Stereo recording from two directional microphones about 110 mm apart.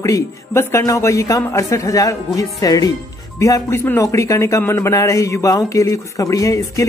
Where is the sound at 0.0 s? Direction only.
25° left (ahead or behind).